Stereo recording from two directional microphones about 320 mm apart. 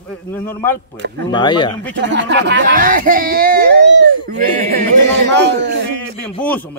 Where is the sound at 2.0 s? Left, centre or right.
Right.